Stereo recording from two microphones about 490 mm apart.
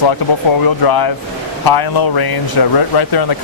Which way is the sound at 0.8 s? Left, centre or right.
Left.